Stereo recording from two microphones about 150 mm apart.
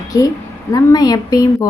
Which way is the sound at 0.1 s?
20° left (ahead or behind).